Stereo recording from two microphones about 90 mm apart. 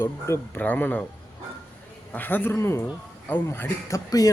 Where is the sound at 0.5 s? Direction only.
15° left (ahead or behind).